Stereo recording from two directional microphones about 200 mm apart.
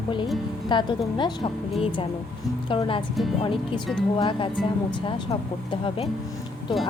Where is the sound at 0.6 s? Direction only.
20° left (ahead or behind).